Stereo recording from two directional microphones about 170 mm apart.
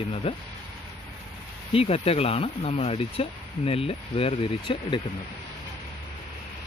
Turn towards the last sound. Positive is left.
turn(degrees=30)  # may be behind; listen again after turning